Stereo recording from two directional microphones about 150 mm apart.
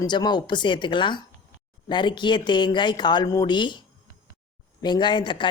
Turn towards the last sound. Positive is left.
turn(degrees=35)  # may be behind; listen again after turning